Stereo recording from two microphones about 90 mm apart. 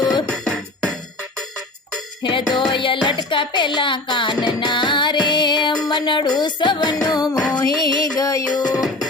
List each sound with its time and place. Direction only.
0.0 s music: 60° left (ahead or behind)
0.3 s music: 5° left (ahead or behind)
2.2 s speech: 60° left (ahead or behind)
4.6 s music: 60° left (ahead or behind)
5.8 s speech: 55° left (ahead or behind)
7.4 s music: 45° left (ahead or behind)
8.5 s music: 50° left (ahead or behind)